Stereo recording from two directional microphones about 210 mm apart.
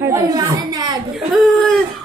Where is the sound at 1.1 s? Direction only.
Centre (ahead or behind).